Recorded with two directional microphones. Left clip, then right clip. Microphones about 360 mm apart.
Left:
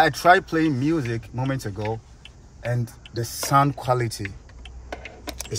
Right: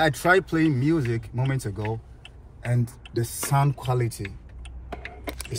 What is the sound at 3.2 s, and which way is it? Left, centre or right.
Speech, left.